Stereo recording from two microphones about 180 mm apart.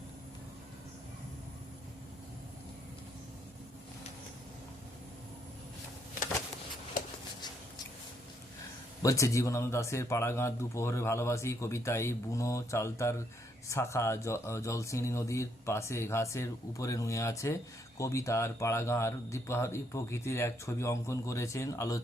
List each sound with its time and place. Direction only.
9.0 s speech: 15° left (ahead or behind)